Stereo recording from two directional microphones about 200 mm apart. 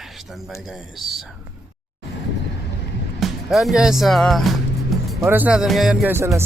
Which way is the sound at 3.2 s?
Centre (ahead or behind).